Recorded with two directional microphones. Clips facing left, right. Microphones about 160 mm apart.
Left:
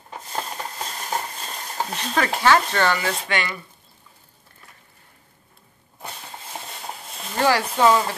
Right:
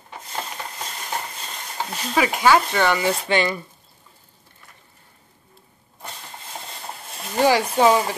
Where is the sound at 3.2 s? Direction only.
30° right (ahead or behind).